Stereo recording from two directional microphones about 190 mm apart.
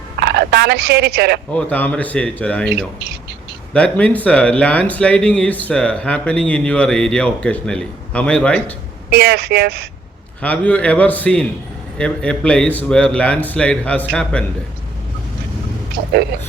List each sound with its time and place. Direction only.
0.2 s speech: 60° right (ahead or behind)
1.5 s speech: 10° left (ahead or behind)
3.7 s speech: 5° left (ahead or behind)
9.0 s speech: 60° right (ahead or behind)
10.4 s speech: 5° left (ahead or behind)
16.0 s a sound: 60° right (ahead or behind)